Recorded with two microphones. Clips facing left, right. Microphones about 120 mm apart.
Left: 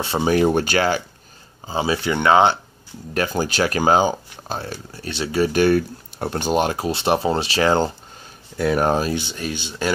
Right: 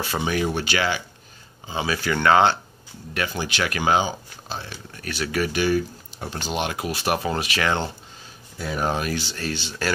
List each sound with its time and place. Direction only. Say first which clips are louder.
0.0 s speech: left 7 dB; 30° left (ahead or behind)
1.7 s speech: left 4 dB; 30° left (ahead or behind)
3.2 s speech: left 6 dB; 40° left (ahead or behind)
4.9 s speech: left 4 dB; 25° left (ahead or behind)
5.5 s speech: left 6 dB; 55° left (ahead or behind); by 7.9 s 35° left (ahead or behind)
8.5 s speech: left 9 dB; 70° left (ahead or behind)
9.0 s speech: left 3 dB; 20° left (ahead or behind)